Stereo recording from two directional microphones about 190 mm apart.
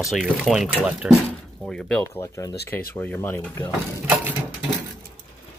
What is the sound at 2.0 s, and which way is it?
Speech, 15° left (ahead or behind).